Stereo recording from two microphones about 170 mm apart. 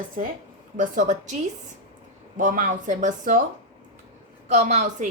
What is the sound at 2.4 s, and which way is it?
A woman's voice, 50° right (ahead or behind).